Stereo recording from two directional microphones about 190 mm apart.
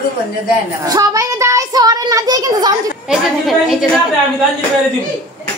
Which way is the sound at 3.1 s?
Centre (ahead or behind).